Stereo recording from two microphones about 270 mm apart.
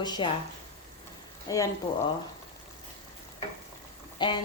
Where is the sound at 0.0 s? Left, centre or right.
Centre.